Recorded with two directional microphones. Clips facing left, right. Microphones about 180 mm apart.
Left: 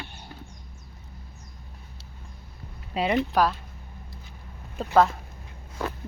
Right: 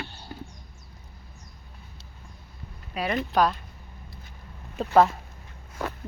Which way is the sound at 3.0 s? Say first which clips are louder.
Left 4 dB; 20° left (ahead or behind).